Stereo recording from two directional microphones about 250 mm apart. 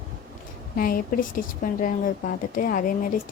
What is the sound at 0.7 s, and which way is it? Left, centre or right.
A woman's voice, left.